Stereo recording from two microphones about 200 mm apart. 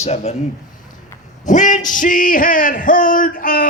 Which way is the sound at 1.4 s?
40° left (ahead or behind).